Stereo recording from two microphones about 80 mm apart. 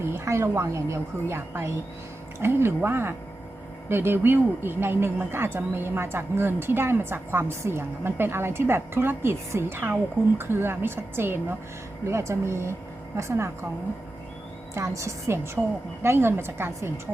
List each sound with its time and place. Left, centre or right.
0.0 s a woman's voice: right
14.8 s a woman's voice: right
15.6 s a woman's voice: centre
16.0 s a woman's voice: right